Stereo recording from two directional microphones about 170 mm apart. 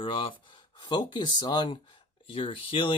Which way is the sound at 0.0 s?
30° left (ahead or behind).